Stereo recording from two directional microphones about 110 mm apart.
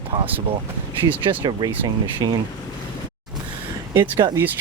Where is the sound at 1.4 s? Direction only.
40° right (ahead or behind).